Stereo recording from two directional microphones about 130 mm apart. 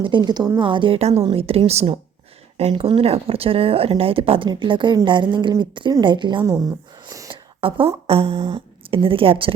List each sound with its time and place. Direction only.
0.0 s speech: 35° right (ahead or behind)
0.9 s speech: 50° right (ahead or behind)
6.4 s speech: 25° right (ahead or behind)
7.3 s speech: 40° right (ahead or behind)